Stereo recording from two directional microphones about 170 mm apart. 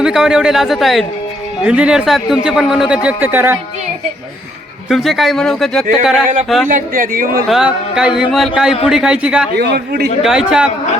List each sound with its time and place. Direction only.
0.0 s a man's voice: 5° right (ahead or behind)
4.9 s a man's voice: centre (ahead or behind)
6.7 s speech: 50° right (ahead or behind)
7.4 s a man's voice: centre (ahead or behind)
9.6 s a man's voice: 70° right (ahead or behind)
10.2 s a man's voice: 5° right (ahead or behind)